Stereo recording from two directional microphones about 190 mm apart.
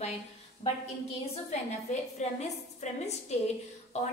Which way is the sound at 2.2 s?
35° left (ahead or behind).